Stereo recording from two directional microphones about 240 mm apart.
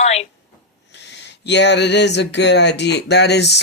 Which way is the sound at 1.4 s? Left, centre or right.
Left.